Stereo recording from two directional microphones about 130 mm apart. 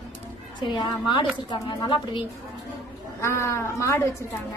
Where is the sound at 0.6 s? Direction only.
35° left (ahead or behind).